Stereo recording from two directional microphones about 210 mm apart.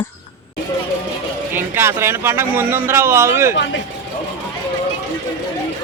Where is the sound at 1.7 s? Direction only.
10° right (ahead or behind).